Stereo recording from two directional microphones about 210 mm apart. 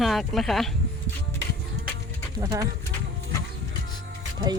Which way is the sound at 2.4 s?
15° right (ahead or behind).